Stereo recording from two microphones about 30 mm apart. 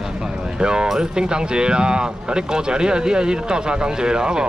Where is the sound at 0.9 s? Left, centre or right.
Right.